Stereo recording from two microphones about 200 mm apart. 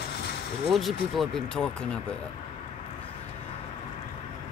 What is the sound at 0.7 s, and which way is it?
Speech, centre (ahead or behind).